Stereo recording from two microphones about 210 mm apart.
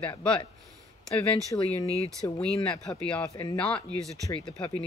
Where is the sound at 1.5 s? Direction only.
15° left (ahead or behind).